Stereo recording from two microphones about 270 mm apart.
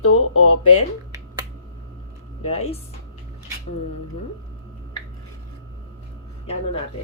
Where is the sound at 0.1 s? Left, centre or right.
Left.